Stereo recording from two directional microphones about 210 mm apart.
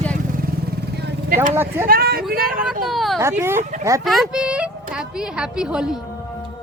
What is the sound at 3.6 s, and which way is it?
Speech, 35° right (ahead or behind).